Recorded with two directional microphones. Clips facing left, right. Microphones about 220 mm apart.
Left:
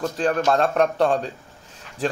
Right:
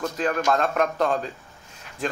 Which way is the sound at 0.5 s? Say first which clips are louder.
Left 4 dB; 35° left (ahead or behind).